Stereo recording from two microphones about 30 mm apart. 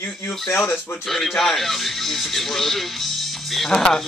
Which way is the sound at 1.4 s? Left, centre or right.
Centre.